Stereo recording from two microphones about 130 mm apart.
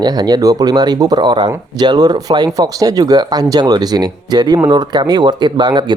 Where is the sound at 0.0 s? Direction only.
30° right (ahead or behind).